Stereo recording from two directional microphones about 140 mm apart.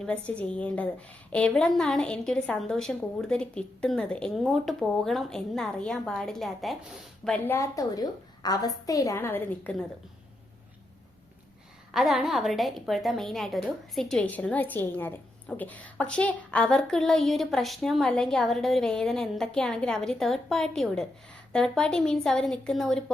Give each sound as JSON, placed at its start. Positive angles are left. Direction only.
{"t": 0.0, "sound": "a woman's voice", "side_deg": 10}
{"t": 7.3, "sound": "a woman's voice", "side_deg": 15}
{"t": 11.9, "sound": "a woman's voice", "side_deg": 0}